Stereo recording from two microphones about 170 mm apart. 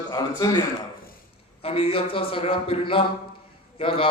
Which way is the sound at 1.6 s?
35° left (ahead or behind).